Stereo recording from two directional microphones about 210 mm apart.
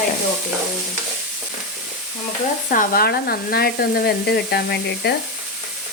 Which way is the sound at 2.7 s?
40° left (ahead or behind).